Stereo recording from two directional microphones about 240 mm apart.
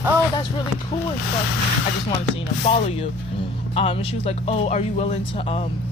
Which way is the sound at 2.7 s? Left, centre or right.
Left.